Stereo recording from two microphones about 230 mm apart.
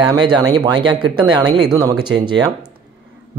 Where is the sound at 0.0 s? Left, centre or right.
Centre.